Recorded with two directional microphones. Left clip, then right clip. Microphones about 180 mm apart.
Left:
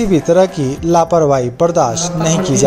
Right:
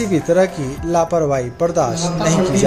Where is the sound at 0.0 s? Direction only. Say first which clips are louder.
Left 4 dB; 30° left (ahead or behind).